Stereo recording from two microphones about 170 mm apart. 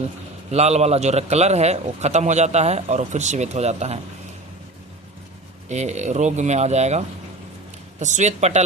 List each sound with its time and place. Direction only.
0.5 s a man's voice: 40° right (ahead or behind)
5.6 s speech: 40° right (ahead or behind)